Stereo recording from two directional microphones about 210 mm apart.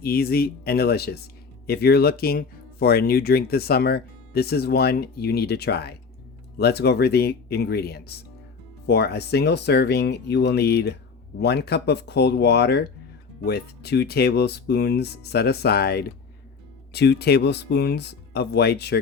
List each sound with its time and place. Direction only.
0.0 s speech: 45° left (ahead or behind)